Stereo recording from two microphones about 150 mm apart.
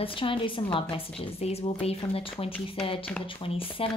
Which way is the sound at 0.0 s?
35° left (ahead or behind).